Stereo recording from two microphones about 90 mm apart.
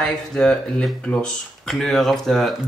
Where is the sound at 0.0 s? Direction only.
10° left (ahead or behind).